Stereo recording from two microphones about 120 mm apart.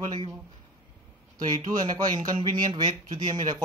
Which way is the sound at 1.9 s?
35° right (ahead or behind).